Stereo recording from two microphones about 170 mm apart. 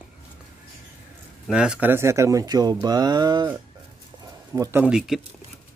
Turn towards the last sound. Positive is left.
turn(degrees=-5)  # may be behind; listen again after turning